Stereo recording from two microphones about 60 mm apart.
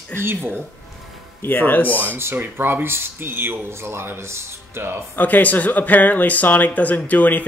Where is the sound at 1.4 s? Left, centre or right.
Left.